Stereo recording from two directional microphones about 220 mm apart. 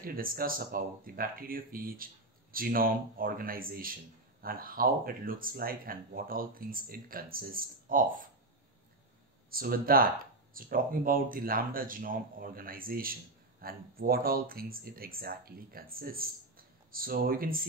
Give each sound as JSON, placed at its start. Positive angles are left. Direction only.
{"t": 0.0, "sound": "speech", "side_deg": -40}
{"t": 9.5, "sound": "speech", "side_deg": -40}